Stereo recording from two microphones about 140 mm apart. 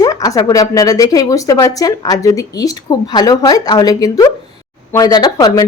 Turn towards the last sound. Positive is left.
turn(degrees=30)  # may be behind; listen again after turning